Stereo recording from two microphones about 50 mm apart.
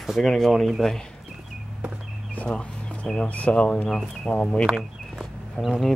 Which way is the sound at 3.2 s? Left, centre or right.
Left.